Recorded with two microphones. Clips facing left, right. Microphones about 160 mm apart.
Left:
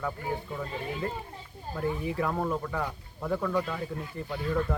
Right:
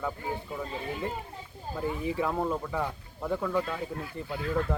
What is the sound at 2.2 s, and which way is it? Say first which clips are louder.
Speech: even; 5° right (ahead or behind).